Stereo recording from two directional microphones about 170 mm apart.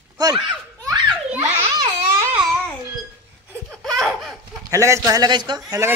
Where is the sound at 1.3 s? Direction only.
10° right (ahead or behind).